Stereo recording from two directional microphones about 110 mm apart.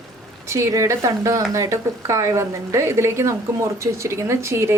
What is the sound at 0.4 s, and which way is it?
Speech, 25° right (ahead or behind).